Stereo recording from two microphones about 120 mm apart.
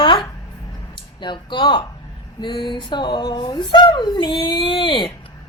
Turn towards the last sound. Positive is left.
turn(degrees=45)  # may be behind; listen again after turning